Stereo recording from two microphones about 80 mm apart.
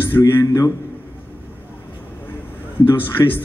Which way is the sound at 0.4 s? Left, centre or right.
Left.